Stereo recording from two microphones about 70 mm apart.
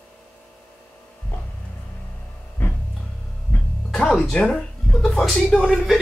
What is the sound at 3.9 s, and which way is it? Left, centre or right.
Music, centre.